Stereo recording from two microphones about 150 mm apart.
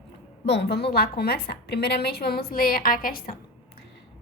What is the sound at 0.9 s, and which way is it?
A woman's voice, 90° left.